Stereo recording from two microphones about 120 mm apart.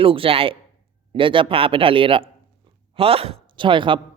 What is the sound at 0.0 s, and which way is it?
A man's voice, 50° right (ahead or behind).